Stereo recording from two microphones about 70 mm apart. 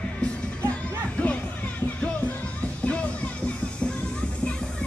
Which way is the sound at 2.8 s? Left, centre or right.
Centre.